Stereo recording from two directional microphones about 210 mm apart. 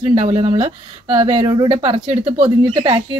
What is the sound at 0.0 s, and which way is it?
A woman's voice, 25° right (ahead or behind).